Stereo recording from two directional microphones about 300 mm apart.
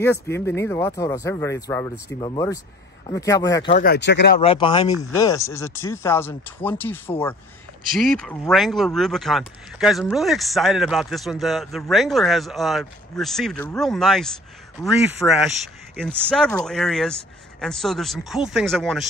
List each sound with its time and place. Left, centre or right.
0.0 s speech: centre
3.7 s speech: left
4.4 s speech: centre
8.0 s speech: centre